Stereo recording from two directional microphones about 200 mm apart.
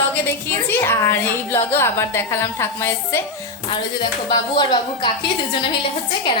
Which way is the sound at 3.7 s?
20° left (ahead or behind).